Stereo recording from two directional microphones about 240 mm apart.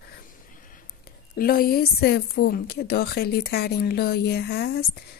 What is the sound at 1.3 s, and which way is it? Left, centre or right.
A woman's voice, left.